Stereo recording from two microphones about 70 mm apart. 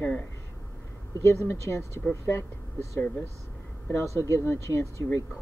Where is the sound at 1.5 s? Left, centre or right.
Left.